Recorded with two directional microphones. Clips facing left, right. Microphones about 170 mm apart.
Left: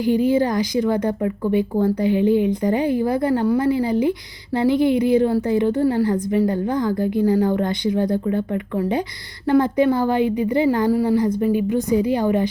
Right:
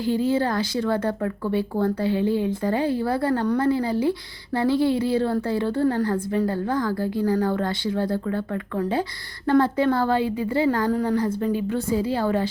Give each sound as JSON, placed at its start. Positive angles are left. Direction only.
{"t": 0.0, "sound": "a woman's voice", "side_deg": 15}